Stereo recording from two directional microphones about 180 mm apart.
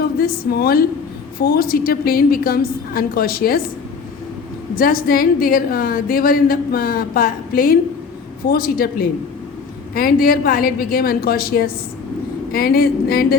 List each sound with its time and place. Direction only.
0.2 s a woman's voice: 55° left (ahead or behind)
4.8 s a woman's voice: 55° left (ahead or behind)